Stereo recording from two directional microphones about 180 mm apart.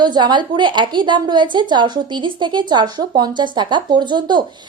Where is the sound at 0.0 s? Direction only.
25° right (ahead or behind).